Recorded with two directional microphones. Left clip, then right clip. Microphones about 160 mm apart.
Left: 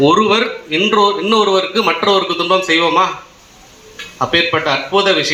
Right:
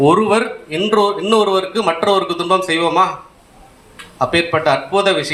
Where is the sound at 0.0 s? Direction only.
45° right (ahead or behind).